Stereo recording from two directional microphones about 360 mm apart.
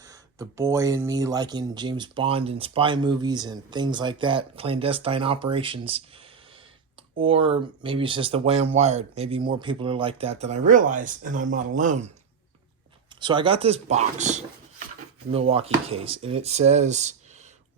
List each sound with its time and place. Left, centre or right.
0.0 s speech: centre
7.3 s speech: centre
13.1 s speech: centre